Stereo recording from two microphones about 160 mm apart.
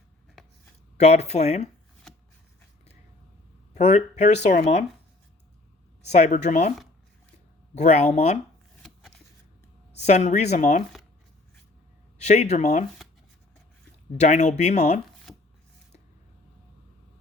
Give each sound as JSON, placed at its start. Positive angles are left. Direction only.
{"t": 0.9, "sound": "speech", "side_deg": 45}
{"t": 3.8, "sound": "speech", "side_deg": 45}
{"t": 6.1, "sound": "speech", "side_deg": 45}
{"t": 7.8, "sound": "speech", "side_deg": 45}
{"t": 8.8, "sound": "shuffling cards", "side_deg": 5}
{"t": 10.0, "sound": "speech", "side_deg": 45}
{"t": 12.2, "sound": "speech", "side_deg": 45}
{"t": 14.2, "sound": "speech", "side_deg": 45}